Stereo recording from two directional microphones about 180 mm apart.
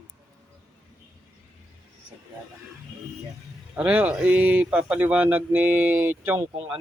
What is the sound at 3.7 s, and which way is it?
Speech, 5° right (ahead or behind).